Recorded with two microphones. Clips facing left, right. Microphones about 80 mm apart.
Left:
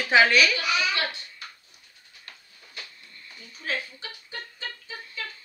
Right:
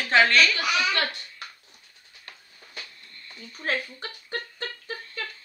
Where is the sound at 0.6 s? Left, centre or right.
Right.